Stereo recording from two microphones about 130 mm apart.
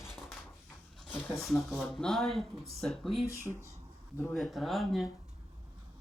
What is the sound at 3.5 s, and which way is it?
Speech, 10° left (ahead or behind).